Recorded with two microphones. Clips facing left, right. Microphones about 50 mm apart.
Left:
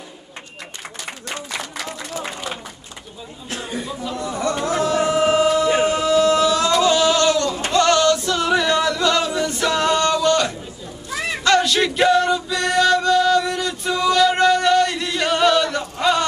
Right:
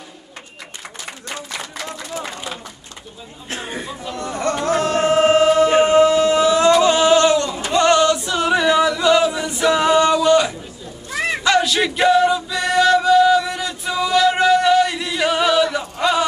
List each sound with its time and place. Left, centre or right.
1.0 s a sound: centre
3.4 s speech: right
4.2 s music: right
5.5 s music: right
11.4 s male singing: centre